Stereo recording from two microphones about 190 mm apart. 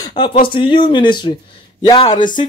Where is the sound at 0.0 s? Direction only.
25° left (ahead or behind).